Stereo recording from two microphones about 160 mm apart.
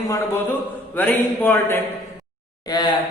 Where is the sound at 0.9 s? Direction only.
10° left (ahead or behind).